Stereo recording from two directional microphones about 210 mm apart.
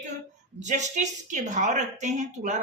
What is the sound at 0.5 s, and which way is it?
Speech, 35° right (ahead or behind).